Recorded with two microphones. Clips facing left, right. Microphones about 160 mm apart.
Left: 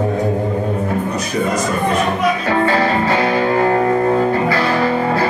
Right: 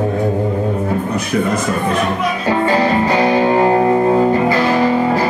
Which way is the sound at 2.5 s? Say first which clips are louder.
Right 4 dB; 20° right (ahead or behind).